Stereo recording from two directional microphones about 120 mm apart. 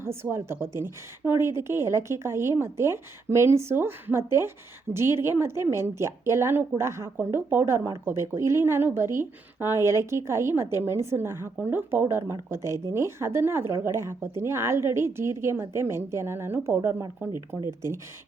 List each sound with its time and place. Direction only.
0.0 s a woman's voice: 20° right (ahead or behind)